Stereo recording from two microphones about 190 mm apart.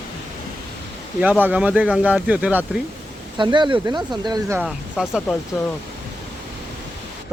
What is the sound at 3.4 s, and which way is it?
Speech, 25° right (ahead or behind).